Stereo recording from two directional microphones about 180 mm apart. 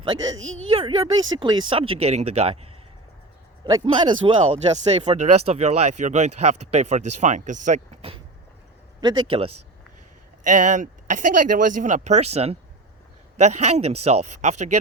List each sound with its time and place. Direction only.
0.3 s speech: 90° right
0.8 s speech: 30° right (ahead or behind)
3.6 s speech: 25° right (ahead or behind)
9.0 s speech: 25° right (ahead or behind)
10.4 s speech: 45° right (ahead or behind)